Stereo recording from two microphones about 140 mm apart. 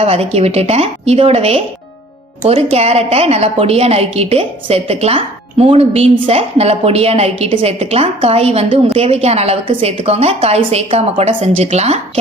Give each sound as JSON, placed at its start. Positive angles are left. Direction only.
{"t": 0.0, "sound": "a woman's voice", "side_deg": -45}